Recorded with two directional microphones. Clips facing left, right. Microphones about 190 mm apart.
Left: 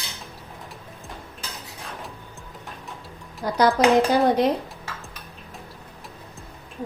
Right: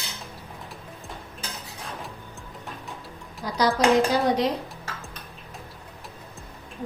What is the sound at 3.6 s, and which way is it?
Speech, 55° left (ahead or behind).